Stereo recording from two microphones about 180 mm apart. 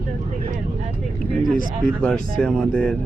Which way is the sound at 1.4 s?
50° right (ahead or behind).